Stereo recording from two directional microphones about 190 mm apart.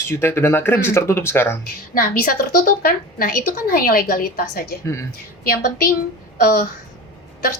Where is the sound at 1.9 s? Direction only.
50° left (ahead or behind).